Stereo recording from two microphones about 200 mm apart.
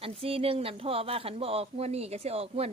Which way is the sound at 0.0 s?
30° right (ahead or behind).